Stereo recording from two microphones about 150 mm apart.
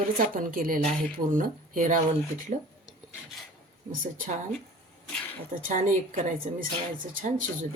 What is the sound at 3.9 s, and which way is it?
Speech, 60° right (ahead or behind).